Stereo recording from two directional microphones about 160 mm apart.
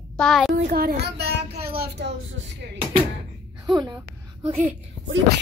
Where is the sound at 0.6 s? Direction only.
70° right (ahead or behind).